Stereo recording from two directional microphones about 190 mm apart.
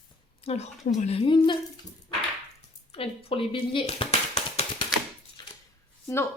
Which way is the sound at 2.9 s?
30° left (ahead or behind).